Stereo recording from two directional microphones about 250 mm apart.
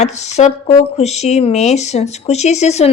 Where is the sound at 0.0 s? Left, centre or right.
Left.